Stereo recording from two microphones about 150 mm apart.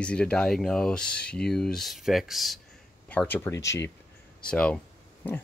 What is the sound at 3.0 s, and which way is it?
Speech, 10° left (ahead or behind).